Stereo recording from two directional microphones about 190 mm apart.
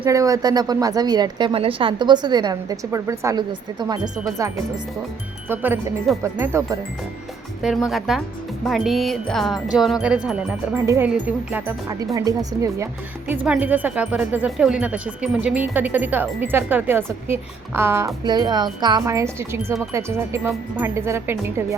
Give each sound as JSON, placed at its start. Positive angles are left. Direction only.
{"t": 0.0, "sound": "speech", "side_deg": -15}
{"t": 5.5, "sound": "speech", "side_deg": -10}
{"t": 7.6, "sound": "speech", "side_deg": 0}